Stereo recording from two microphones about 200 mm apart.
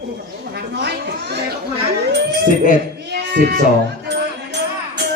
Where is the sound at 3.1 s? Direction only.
50° right (ahead or behind).